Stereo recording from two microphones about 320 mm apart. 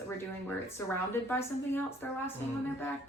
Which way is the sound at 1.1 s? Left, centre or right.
Centre.